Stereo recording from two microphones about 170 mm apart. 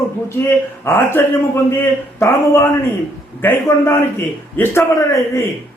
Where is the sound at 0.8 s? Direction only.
15° left (ahead or behind).